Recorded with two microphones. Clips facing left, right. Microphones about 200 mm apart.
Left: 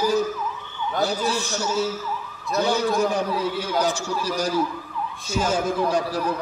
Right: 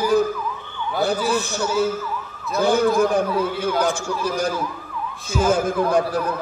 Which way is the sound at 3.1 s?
55° right (ahead or behind).